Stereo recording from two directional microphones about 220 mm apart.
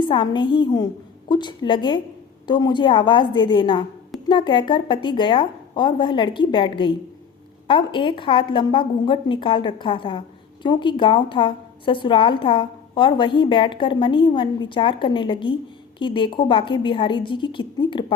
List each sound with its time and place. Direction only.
0.0 s a woman's voice: 20° left (ahead or behind)